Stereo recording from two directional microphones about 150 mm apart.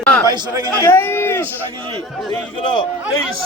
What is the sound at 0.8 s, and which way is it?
Speech, 15° left (ahead or behind).